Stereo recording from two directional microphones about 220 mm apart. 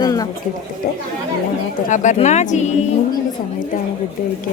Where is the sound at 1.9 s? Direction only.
35° left (ahead or behind).